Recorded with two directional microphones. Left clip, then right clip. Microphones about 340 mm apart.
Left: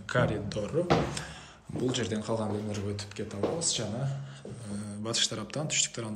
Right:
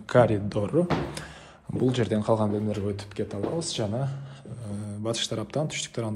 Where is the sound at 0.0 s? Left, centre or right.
Centre.